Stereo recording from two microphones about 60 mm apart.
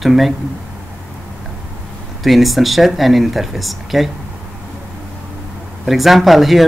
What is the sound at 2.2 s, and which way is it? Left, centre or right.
Speech, centre.